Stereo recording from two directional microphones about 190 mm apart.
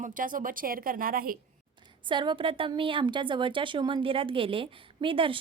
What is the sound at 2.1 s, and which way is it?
A woman's voice, 25° right (ahead or behind).